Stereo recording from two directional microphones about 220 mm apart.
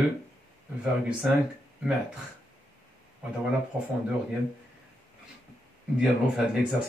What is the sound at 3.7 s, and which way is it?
Speech, 5° right (ahead or behind).